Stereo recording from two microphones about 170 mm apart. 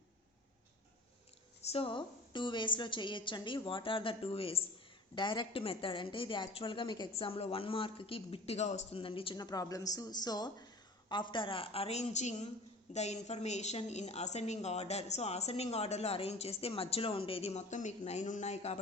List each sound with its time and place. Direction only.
1.6 s a woman's voice: 35° left (ahead or behind)